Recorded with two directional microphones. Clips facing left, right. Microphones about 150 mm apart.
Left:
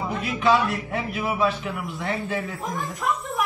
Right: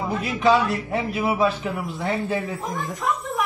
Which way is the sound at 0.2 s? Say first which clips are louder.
Right 2 dB; 35° right (ahead or behind).